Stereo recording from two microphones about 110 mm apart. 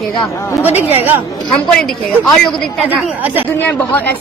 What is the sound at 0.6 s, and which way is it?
Speech, 20° right (ahead or behind).